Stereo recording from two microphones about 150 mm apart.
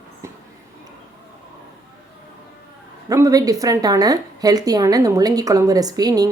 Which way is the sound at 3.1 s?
20° right (ahead or behind).